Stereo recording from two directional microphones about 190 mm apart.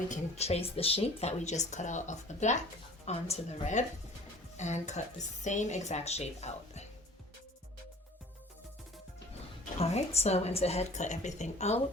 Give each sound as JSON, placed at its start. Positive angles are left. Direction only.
{"t": 0.1, "sound": "speech", "side_deg": 35}
{"t": 9.7, "sound": "speech", "side_deg": 30}